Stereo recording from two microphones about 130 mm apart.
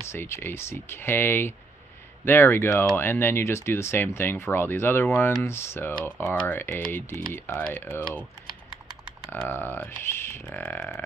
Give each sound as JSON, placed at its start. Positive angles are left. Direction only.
{"t": 0.1, "sound": "speech", "side_deg": 20}
{"t": 9.3, "sound": "speech", "side_deg": 15}